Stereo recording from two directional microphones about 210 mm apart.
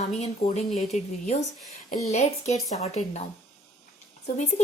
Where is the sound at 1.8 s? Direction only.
30° left (ahead or behind).